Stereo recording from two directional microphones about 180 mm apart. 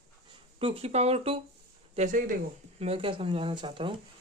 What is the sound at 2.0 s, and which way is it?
Speech, 45° right (ahead or behind).